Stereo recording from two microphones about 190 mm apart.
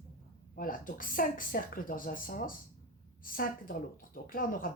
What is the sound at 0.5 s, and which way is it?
Speech, 45° left (ahead or behind).